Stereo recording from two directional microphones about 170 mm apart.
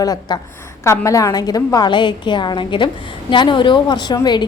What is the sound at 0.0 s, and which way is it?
A woman's voice, 20° left (ahead or behind).